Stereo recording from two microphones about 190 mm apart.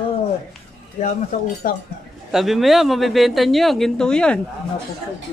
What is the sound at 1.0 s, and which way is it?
Cutlery, 40° left (ahead or behind).